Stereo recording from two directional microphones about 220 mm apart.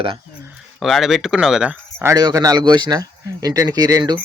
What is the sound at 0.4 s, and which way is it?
Speech, 5° right (ahead or behind).